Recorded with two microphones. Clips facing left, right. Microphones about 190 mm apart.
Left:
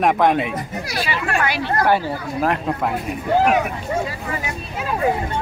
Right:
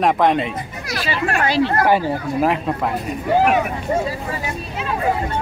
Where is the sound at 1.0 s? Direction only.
30° right (ahead or behind).